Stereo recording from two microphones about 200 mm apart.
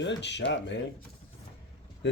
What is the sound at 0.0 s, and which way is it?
Speech, 60° left (ahead or behind).